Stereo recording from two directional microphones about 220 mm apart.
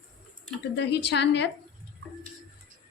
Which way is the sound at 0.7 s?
55° left (ahead or behind).